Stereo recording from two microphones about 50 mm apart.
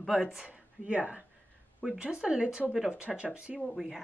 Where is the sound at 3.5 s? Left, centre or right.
Centre.